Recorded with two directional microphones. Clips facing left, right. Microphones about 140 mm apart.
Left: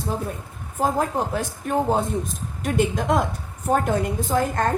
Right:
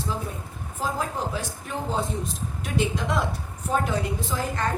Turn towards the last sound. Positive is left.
turn(degrees=50)  # may be behind; listen again after turning